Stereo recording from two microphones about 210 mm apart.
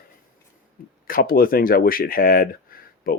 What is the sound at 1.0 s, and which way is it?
Speech, 45° left (ahead or behind).